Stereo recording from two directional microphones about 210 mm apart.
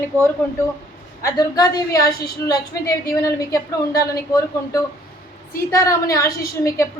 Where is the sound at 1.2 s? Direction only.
15° left (ahead or behind).